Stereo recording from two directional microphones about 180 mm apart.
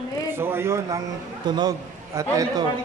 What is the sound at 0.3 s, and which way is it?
A man's voice, 10° right (ahead or behind).